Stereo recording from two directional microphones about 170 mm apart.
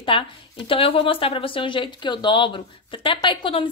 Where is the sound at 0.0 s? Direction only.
30° left (ahead or behind).